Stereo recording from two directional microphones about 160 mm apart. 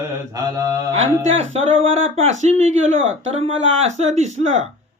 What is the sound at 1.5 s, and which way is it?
Speech, 40° right (ahead or behind).